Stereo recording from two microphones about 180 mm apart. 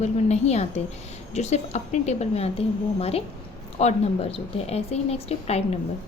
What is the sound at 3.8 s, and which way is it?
A woman's voice, 35° left (ahead or behind).